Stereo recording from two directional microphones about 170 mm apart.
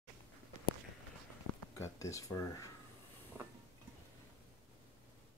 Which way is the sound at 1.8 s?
20° left (ahead or behind).